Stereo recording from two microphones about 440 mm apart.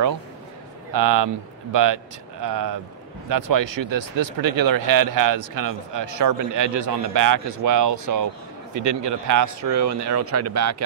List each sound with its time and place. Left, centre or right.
0.9 s speech: right